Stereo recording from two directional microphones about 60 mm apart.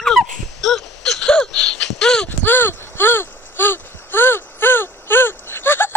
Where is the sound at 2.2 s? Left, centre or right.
Left.